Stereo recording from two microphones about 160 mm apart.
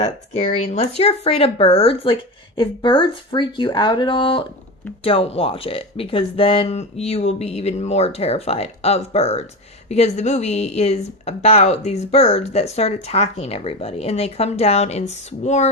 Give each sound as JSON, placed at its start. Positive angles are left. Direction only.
{"t": 0.0, "sound": "speech", "side_deg": 45}